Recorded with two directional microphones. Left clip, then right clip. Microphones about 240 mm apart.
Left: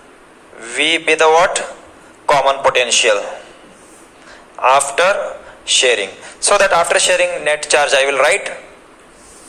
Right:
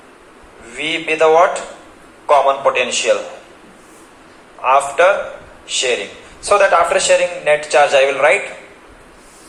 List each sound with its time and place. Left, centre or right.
0.7 s a man's voice: left
4.6 s a man's voice: left